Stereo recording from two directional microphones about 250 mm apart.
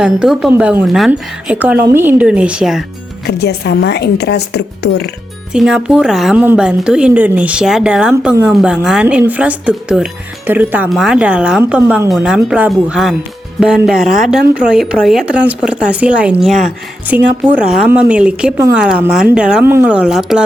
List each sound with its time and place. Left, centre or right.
0.0 s a woman's voice: centre
3.4 s speech: left
5.5 s a woman's voice: centre